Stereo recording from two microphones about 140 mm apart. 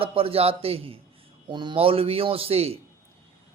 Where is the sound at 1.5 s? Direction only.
35° right (ahead or behind).